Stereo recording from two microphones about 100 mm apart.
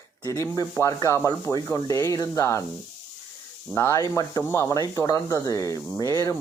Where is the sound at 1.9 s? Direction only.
30° left (ahead or behind).